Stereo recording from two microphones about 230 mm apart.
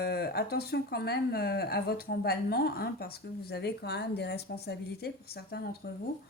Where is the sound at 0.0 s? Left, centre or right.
Left.